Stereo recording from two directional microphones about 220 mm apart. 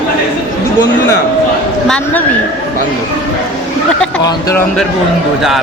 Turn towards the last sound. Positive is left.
turn(degrees=15)  # may be behind; listen again after turning